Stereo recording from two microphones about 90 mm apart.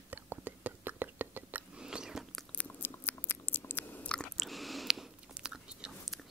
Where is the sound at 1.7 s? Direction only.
10° right (ahead or behind).